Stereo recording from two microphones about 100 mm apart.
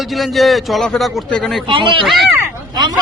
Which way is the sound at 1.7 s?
60° right (ahead or behind).